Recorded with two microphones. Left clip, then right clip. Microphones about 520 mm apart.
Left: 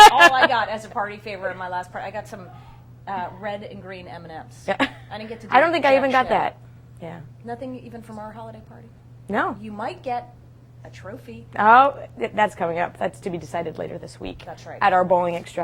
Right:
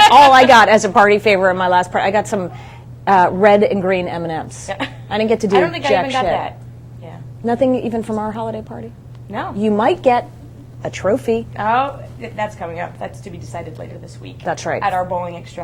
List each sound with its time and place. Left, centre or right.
0.5 s a woman's voice: right
4.6 s a woman's voice: left
5.0 s a woman's voice: right
5.5 s a woman's voice: left
7.4 s a woman's voice: right
11.5 s a woman's voice: left
14.4 s a woman's voice: right
14.8 s a woman's voice: left